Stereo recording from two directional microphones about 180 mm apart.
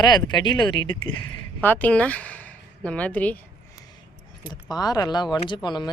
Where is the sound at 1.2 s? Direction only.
10° left (ahead or behind).